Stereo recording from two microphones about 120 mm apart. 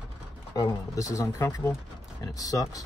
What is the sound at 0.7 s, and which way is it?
Speech, 25° left (ahead or behind).